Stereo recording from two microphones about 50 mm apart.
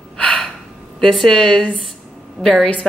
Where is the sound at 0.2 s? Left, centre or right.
Left.